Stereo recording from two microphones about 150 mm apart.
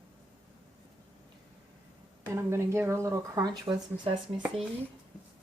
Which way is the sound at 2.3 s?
20° right (ahead or behind).